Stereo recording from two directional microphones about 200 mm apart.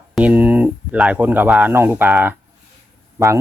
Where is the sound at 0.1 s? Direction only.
5° right (ahead or behind).